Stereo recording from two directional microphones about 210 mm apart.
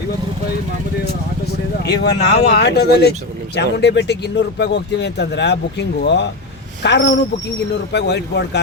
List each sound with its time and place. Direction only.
1.8 s speech: 50° left (ahead or behind)